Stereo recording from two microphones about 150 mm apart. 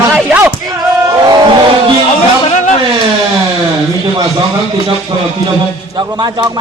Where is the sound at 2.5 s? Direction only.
50° left (ahead or behind).